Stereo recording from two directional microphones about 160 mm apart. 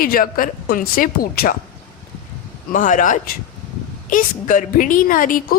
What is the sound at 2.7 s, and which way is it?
Speech, 55° left (ahead or behind).